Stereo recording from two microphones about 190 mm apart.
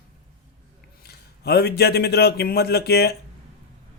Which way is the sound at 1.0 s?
60° left (ahead or behind).